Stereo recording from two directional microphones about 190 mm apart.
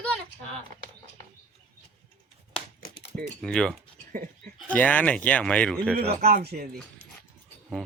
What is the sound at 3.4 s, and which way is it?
Speech, 5° left (ahead or behind).